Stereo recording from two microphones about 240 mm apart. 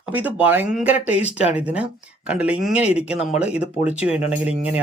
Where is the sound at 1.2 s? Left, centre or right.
Left.